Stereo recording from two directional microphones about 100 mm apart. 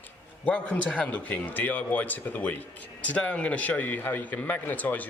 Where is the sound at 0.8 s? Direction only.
15° left (ahead or behind).